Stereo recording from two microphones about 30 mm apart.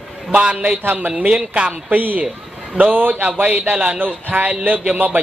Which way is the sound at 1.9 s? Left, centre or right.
Right.